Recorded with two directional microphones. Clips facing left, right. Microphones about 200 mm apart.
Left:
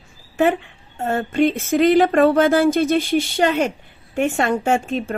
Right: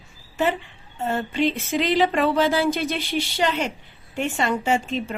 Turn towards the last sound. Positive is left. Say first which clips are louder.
# left 3 dB
turn(degrees=50)  # may be behind; listen again after turning